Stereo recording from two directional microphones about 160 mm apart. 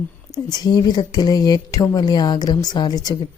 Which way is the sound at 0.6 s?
25° left (ahead or behind).